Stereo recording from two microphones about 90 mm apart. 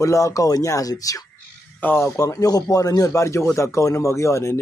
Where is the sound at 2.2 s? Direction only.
40° left (ahead or behind).